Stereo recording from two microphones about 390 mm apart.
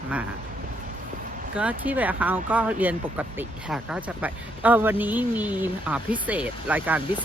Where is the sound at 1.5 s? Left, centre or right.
Centre.